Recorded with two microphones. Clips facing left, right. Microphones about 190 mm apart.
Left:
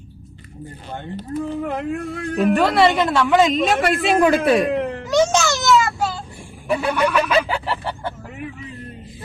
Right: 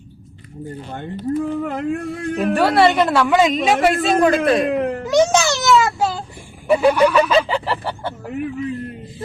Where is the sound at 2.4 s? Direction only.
35° right (ahead or behind).